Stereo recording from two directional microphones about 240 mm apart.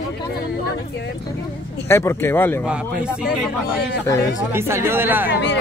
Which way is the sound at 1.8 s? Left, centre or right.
Centre.